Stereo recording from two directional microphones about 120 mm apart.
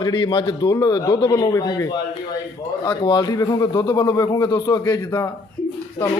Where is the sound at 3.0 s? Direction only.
35° left (ahead or behind).